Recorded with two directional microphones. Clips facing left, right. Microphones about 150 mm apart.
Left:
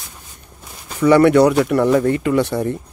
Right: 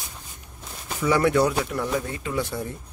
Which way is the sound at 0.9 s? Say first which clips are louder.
Left 9 dB; 65° left (ahead or behind).